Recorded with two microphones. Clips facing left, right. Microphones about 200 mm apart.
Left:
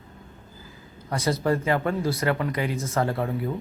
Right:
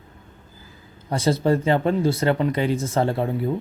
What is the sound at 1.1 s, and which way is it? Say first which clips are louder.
Speech: right 4 dB; 30° right (ahead or behind).